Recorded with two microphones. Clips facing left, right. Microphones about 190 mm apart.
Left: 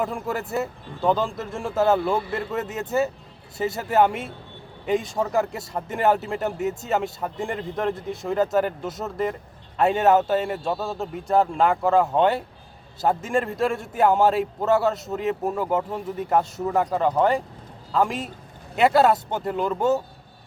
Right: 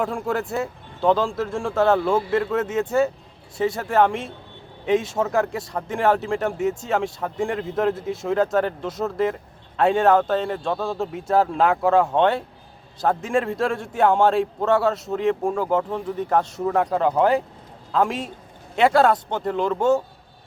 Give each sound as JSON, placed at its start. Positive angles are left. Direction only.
{"t": 0.0, "sound": "speech", "side_deg": 0}